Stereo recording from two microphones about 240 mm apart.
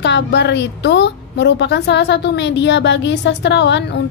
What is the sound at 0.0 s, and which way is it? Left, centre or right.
A woman's voice, left.